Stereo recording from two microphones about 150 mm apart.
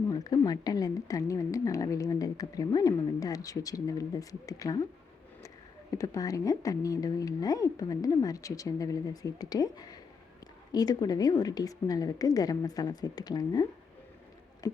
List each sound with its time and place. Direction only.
0.1 s speech: 25° left (ahead or behind)
5.9 s speech: 20° left (ahead or behind)